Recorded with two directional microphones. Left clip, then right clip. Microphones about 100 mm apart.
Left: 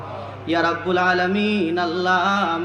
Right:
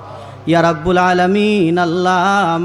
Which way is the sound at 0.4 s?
50° right (ahead or behind).